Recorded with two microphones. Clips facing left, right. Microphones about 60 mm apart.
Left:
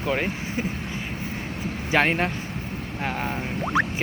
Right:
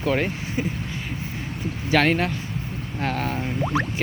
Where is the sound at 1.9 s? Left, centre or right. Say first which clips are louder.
Right 2 dB; left.